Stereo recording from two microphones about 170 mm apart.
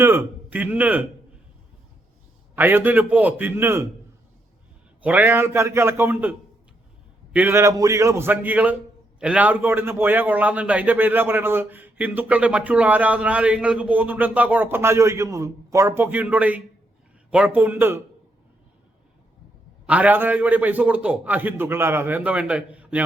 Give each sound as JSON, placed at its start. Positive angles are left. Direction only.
{"t": 0.0, "sound": "a man's voice", "side_deg": -15}
{"t": 2.6, "sound": "a man's voice", "side_deg": -10}
{"t": 5.0, "sound": "a man's voice", "side_deg": -10}
{"t": 7.3, "sound": "a man's voice", "side_deg": -15}
{"t": 19.9, "sound": "a man's voice", "side_deg": -10}